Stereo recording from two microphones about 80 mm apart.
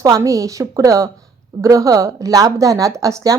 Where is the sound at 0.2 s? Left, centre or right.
Right.